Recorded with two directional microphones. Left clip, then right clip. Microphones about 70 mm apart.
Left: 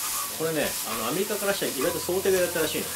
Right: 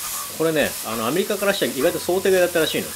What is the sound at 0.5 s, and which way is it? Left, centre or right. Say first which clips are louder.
Speech: right 6 dB; right.